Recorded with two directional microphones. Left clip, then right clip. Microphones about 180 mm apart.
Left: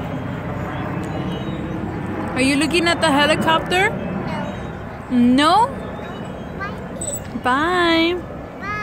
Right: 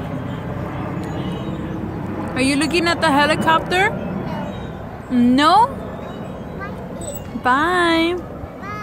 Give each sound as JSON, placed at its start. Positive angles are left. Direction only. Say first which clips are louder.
{"t": 2.3, "sound": "speech", "louder": "even", "side_deg": 5}
{"t": 5.1, "sound": "speech", "louder": "right 1 dB", "side_deg": 0}
{"t": 7.4, "sound": "speech", "louder": "right 1 dB", "side_deg": 0}